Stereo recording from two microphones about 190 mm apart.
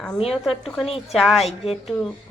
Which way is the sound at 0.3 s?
Centre (ahead or behind).